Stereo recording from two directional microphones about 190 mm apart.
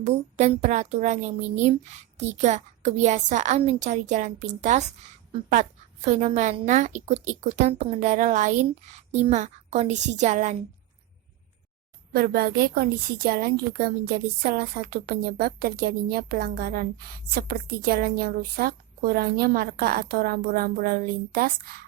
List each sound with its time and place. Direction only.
0.0 s a woman's voice: 35° right (ahead or behind)
12.1 s a woman's voice: 50° right (ahead or behind)